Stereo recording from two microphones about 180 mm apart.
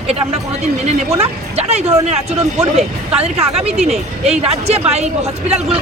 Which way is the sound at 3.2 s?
35° right (ahead or behind).